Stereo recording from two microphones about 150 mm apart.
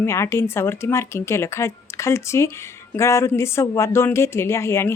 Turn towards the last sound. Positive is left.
turn(degrees=15)  # may be behind; listen again after turning